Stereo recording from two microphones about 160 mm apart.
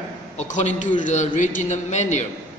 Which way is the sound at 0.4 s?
50° left (ahead or behind).